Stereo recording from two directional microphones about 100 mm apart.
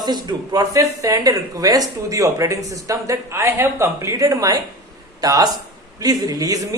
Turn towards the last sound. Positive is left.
turn(degrees=-40)  # may be behind; listen again after turning